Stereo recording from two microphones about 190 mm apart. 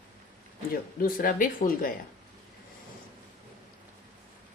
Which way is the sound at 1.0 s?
45° left (ahead or behind).